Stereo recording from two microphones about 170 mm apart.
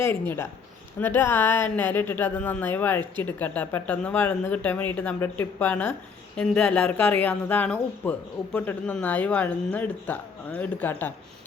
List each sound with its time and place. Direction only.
0.1 s speech: 15° left (ahead or behind)